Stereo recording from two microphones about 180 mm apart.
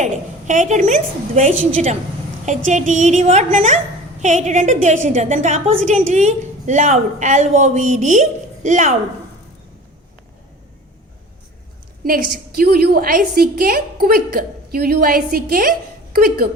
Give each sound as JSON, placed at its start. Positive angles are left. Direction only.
{"t": 0.0, "sound": "a woman's voice", "side_deg": -40}
{"t": 12.0, "sound": "a woman's voice", "side_deg": -50}